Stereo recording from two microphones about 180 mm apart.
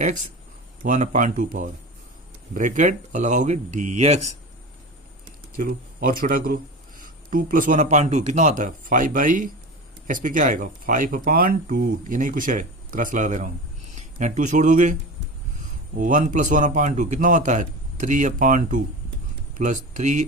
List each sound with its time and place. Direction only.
0.8 s speech: 45° right (ahead or behind)
5.5 s speech: 50° right (ahead or behind)
16.0 s speech: 45° right (ahead or behind)